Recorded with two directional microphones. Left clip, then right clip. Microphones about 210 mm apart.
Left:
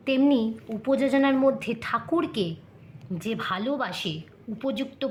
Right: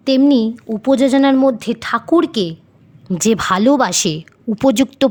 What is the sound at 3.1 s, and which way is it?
A woman's voice, 45° right (ahead or behind).